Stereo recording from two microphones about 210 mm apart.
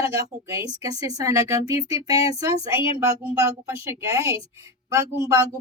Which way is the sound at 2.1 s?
30° left (ahead or behind).